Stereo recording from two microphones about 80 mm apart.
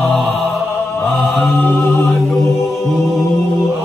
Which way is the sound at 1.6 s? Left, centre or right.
Left.